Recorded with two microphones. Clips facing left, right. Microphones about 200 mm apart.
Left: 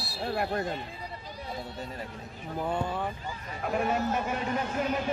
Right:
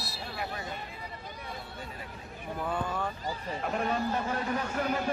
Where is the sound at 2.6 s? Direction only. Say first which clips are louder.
Left 2 dB; 25° left (ahead or behind).